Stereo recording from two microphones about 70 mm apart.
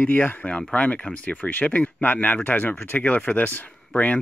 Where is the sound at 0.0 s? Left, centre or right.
Left.